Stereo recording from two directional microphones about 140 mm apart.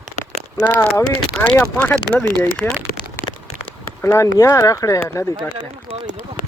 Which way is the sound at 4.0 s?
20° left (ahead or behind).